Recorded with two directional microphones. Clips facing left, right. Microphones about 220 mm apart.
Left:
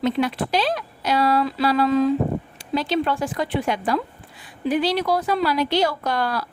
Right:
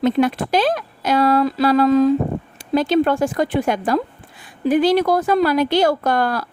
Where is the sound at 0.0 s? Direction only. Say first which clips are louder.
Right 5 dB; 50° right (ahead or behind).